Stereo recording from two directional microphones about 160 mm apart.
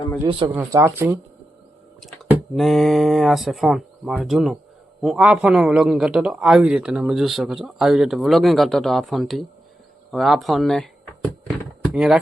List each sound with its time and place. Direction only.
0.3 s speech: 35° right (ahead or behind)
0.5 s speech: 15° right (ahead or behind)
2.6 s a man's voice: centre (ahead or behind)